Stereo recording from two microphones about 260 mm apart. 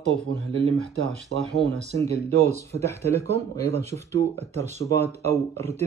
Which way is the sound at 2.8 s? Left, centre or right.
Centre.